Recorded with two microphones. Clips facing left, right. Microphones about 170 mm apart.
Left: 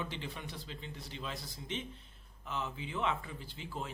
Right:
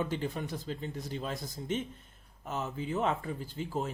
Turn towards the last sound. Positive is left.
turn(degrees=-45)  # may be behind; listen again after turning